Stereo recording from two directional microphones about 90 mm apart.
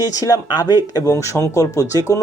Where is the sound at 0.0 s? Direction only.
45° left (ahead or behind).